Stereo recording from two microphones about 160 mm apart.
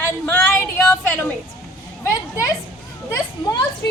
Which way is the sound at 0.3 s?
10° left (ahead or behind).